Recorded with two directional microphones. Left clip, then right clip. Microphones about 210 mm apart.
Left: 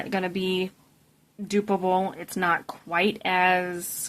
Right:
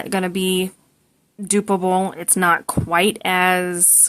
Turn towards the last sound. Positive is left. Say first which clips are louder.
# right 9 dB
turn(degrees=-40)  # may be behind; listen again after turning